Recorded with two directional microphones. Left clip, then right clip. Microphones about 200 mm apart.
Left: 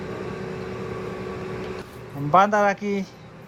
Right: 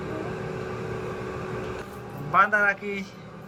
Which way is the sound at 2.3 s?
30° left (ahead or behind).